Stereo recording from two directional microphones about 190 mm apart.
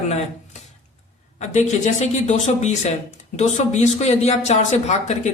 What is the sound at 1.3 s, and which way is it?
Speech, 35° left (ahead or behind).